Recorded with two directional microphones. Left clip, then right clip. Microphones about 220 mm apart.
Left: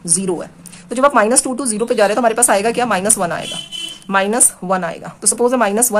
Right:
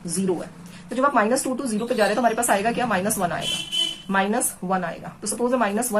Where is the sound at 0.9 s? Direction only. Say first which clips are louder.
Left 7 dB; 50° left (ahead or behind).